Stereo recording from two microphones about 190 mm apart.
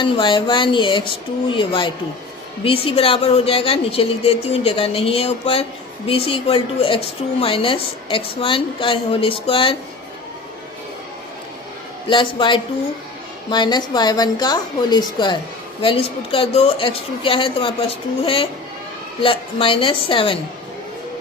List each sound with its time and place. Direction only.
0.0 s a woman's voice: 25° left (ahead or behind)
12.0 s a woman's voice: 25° left (ahead or behind)
19.2 s a woman's voice: 30° left (ahead or behind)